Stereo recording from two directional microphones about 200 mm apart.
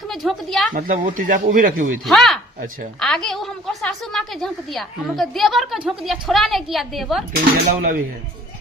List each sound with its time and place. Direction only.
0.1 s speech: centre (ahead or behind)
0.7 s a man's voice: 45° right (ahead or behind)
2.0 s a woman's voice: centre (ahead or behind)
7.3 s a man's voice: 45° right (ahead or behind)